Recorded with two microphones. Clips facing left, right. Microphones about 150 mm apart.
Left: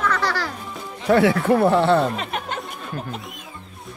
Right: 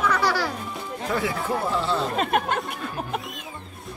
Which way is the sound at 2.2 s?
50° right (ahead or behind).